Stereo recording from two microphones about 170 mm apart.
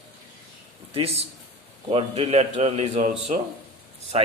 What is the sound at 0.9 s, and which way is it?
A man's voice, 35° right (ahead or behind).